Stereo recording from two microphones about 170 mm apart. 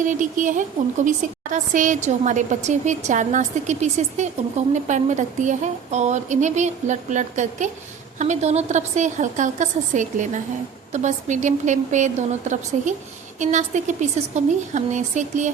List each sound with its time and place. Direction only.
0.0 s a woman's voice: 50° right (ahead or behind)